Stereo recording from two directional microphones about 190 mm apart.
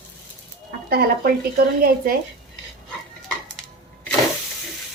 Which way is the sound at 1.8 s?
50° right (ahead or behind).